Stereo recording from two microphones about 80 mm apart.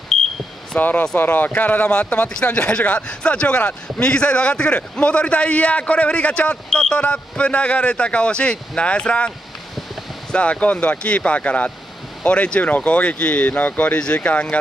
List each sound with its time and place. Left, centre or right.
0.1 s smoke detector: centre
0.7 s speech: left
10.3 s speech: centre